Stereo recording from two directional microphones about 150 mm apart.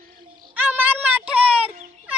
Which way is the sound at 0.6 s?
10° right (ahead or behind).